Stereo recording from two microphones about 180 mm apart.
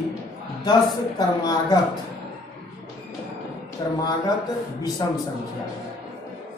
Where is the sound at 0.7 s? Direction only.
25° left (ahead or behind).